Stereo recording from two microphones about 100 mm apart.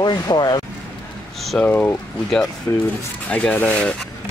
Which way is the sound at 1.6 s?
15° left (ahead or behind).